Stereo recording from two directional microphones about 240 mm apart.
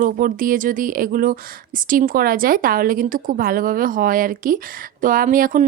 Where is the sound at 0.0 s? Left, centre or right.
Right.